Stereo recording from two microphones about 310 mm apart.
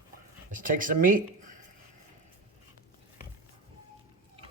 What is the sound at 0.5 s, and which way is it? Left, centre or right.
Speech, right.